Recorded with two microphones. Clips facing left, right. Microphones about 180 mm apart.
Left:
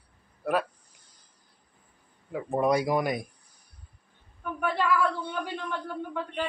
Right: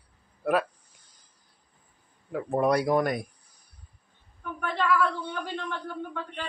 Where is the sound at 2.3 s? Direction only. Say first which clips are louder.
Right 1 dB; centre (ahead or behind).